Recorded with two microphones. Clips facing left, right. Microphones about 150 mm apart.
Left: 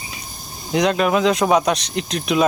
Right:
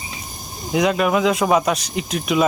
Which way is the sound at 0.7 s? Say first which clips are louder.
Even; 5° right (ahead or behind).